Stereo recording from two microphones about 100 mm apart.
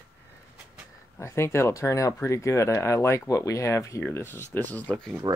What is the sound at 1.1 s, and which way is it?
Speech, 25° left (ahead or behind).